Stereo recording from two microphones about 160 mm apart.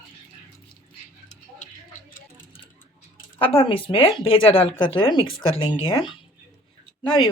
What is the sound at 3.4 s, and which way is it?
Speech, 35° left (ahead or behind).